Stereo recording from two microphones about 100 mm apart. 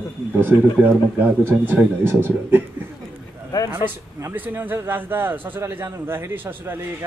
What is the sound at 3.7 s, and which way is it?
A man's voice, 25° right (ahead or behind).